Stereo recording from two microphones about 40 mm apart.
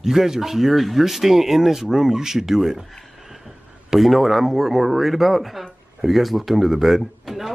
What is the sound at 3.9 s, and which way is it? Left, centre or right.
Speech, centre.